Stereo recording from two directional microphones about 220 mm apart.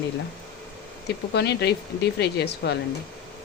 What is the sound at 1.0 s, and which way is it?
Speech, 50° left (ahead or behind).